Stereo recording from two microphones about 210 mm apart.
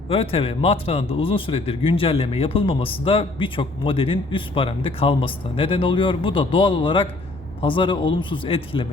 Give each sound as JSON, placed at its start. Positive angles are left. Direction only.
{"t": 0.1, "sound": "a man's voice", "side_deg": 25}